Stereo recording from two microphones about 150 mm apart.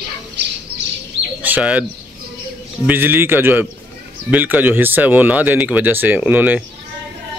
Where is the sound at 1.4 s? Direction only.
10° right (ahead or behind).